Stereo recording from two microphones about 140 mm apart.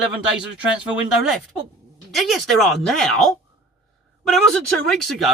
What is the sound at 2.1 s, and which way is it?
Speech, centre (ahead or behind).